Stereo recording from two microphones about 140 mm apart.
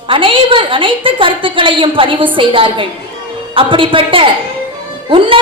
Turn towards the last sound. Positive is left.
turn(degrees=-40)  # may be behind; listen again after turning